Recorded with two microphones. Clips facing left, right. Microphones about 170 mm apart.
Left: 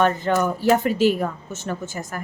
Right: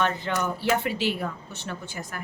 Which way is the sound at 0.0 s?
45° left (ahead or behind).